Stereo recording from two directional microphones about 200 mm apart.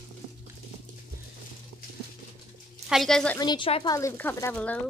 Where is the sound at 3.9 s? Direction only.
15° left (ahead or behind).